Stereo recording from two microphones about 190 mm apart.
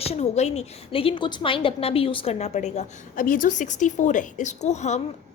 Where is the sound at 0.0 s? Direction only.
35° left (ahead or behind).